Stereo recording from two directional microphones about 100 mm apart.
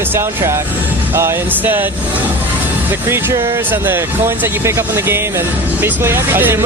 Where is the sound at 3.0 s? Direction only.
25° right (ahead or behind).